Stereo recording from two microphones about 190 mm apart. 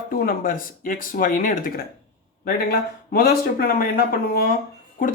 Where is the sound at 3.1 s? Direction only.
50° left (ahead or behind).